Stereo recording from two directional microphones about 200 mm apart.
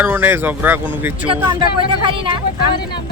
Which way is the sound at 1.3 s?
25° right (ahead or behind).